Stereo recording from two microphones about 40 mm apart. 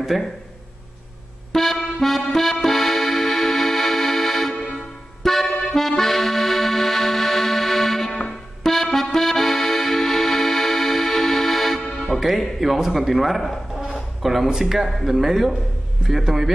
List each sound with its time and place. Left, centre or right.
0.1 s a man's voice: centre
1.5 s music: centre
4.6 s accordion: centre
8.1 s music: left
8.6 s music: centre
12.2 s a man's voice: centre